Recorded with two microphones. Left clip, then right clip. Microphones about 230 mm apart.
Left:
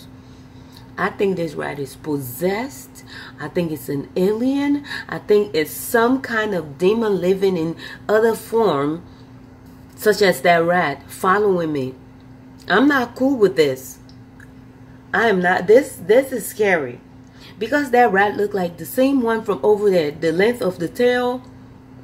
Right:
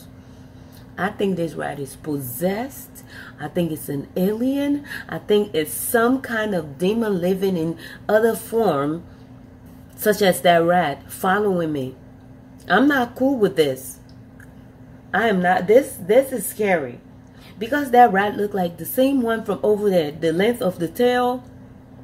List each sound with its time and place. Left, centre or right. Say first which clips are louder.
0.9 s speech: left 3 dB; centre
10.0 s a woman's voice: left 2 dB; centre
15.0 s speech: left 2 dB; centre